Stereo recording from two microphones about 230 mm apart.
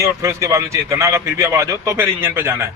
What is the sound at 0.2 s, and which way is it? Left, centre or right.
A man's voice, centre.